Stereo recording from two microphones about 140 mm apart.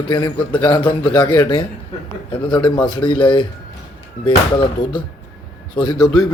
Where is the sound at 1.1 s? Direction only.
30° left (ahead or behind).